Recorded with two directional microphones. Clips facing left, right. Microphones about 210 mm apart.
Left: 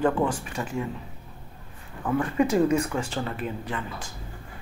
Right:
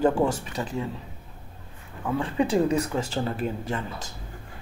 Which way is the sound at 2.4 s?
35° right (ahead or behind).